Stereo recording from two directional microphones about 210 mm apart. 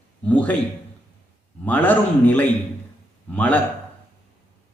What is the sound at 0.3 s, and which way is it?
Speech, 5° left (ahead or behind).